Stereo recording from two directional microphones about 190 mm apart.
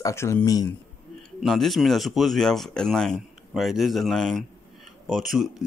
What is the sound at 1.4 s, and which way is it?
Speech, centre (ahead or behind).